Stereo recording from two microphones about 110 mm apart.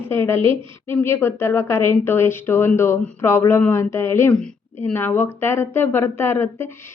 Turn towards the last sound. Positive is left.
turn(degrees=20)  # may be behind; listen again after turning